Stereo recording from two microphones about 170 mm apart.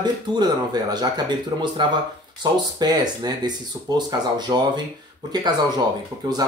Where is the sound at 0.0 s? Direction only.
25° right (ahead or behind).